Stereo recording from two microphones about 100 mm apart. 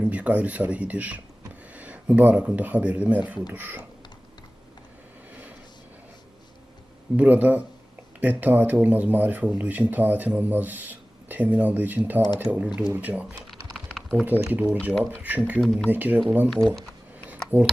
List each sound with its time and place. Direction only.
0.0 s speech: 10° right (ahead or behind)
7.2 s speech: 15° right (ahead or behind)
13.5 s typing: centre (ahead or behind)
14.5 s speech: 15° right (ahead or behind)
15.6 s speech: centre (ahead or behind)
15.9 s speech: 15° right (ahead or behind)
16.5 s speech: 5° left (ahead or behind)
17.2 s a sound: 15° right (ahead or behind)